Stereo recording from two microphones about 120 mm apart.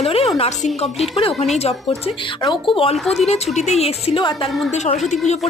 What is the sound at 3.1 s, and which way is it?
Speech, 65° left (ahead or behind).